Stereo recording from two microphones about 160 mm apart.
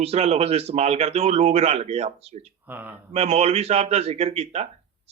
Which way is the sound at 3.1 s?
40° right (ahead or behind).